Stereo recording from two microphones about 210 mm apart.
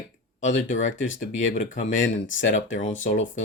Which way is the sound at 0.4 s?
35° left (ahead or behind).